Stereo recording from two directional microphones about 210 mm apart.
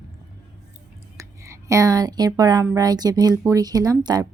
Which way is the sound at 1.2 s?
15° right (ahead or behind).